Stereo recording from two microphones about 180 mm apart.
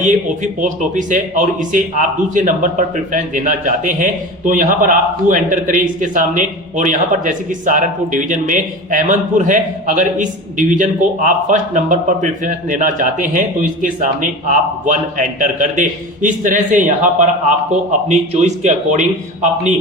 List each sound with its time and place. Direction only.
0.0 s a man's voice: 45° right (ahead or behind)